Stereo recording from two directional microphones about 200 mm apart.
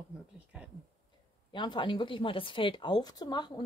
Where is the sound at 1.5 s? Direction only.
25° left (ahead or behind).